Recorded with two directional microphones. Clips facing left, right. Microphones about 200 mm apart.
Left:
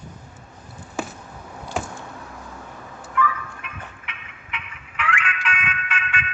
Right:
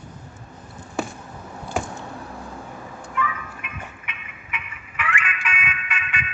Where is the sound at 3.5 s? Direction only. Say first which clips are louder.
Right 1 dB; 10° right (ahead or behind).